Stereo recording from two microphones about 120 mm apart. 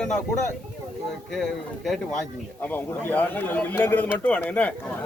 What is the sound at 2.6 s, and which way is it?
Speech, 15° left (ahead or behind).